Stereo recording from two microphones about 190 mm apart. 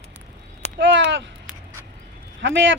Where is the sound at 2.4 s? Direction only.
80° right.